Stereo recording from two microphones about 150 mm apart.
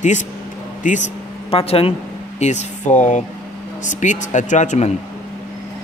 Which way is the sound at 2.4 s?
50° left (ahead or behind).